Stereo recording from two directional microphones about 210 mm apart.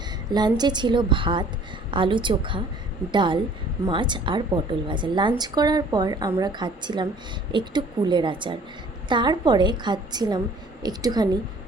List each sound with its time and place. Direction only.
0.3 s a woman's voice: 20° right (ahead or behind)